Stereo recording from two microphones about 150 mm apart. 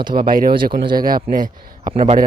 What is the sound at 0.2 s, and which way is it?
Speech, 75° right (ahead or behind).